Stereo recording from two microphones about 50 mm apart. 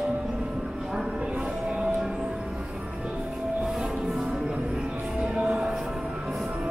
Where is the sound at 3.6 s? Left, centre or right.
Centre.